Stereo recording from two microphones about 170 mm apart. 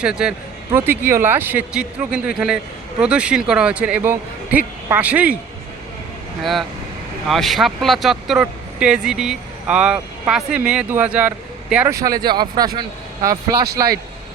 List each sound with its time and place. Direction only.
0.0 s speech: 5° right (ahead or behind)
6.4 s speech: centre (ahead or behind); by 13.9 s 20° right (ahead or behind)